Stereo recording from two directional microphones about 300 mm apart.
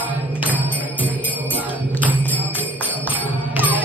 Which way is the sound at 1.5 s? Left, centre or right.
Centre.